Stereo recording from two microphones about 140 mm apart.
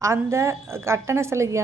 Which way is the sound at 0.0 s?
20° right (ahead or behind).